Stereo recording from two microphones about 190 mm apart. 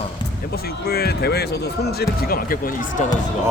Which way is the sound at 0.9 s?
55° left (ahead or behind).